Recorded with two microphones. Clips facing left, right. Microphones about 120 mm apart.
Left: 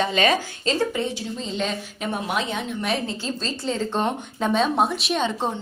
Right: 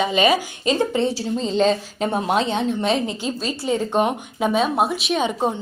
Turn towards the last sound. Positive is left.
turn(degrees=0)  # may be behind; listen again after turning